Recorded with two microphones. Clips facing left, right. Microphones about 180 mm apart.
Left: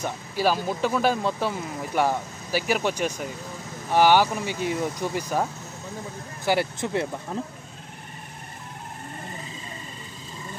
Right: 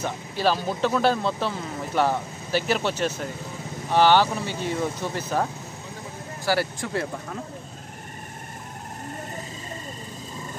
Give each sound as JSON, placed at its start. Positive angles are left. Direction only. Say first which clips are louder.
{"t": 0.0, "sound": "speech", "louder": "even", "side_deg": 10}